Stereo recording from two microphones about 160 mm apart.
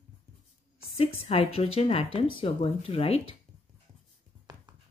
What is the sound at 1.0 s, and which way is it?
Speech, 35° left (ahead or behind).